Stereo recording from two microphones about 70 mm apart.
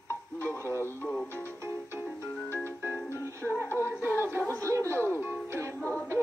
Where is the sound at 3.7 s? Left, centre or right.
Right.